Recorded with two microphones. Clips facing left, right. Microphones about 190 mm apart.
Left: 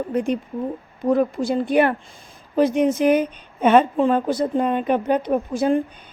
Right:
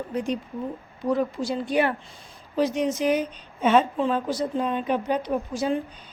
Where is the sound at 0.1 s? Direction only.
55° left (ahead or behind).